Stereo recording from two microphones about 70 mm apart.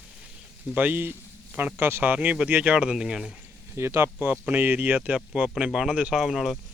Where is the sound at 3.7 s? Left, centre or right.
Right; by 6.5 s centre.